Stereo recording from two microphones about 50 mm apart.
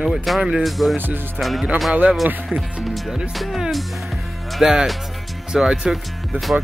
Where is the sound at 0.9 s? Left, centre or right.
Right.